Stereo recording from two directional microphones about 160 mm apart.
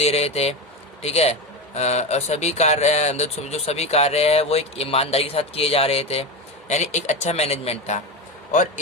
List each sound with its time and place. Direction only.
0.0 s a man's voice: 40° left (ahead or behind)